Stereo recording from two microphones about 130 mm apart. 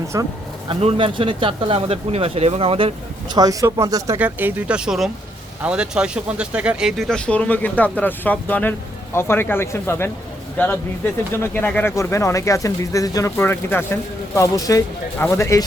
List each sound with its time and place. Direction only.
0.1 s speech: 25° right (ahead or behind)
0.7 s speech: 45° right (ahead or behind)
3.3 s speech: 30° right (ahead or behind)
4.2 s speech: 15° right (ahead or behind); by 15.6 s 25° left (ahead or behind)